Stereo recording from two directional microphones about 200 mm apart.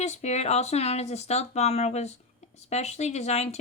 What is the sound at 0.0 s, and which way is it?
Speech, 35° left (ahead or behind).